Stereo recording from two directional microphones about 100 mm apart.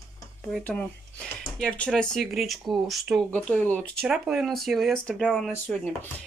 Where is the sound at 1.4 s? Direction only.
10° left (ahead or behind).